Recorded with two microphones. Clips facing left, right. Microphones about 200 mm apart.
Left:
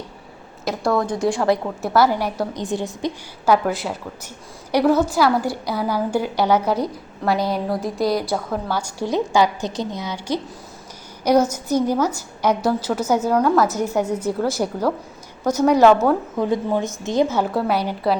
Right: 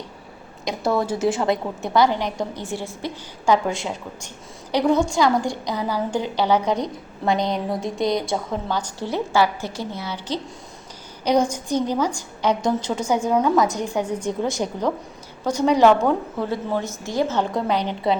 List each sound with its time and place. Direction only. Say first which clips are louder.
0.6 s a woman's voice: left 2 dB; centre (ahead or behind); by 3.1 s 15° left (ahead or behind)
3.4 s a woman's voice: left 2 dB; 5° left (ahead or behind)
11.4 s a woman's voice: left 3 dB; 10° left (ahead or behind)
17.3 s a woman's voice: left 2 dB; 5° left (ahead or behind)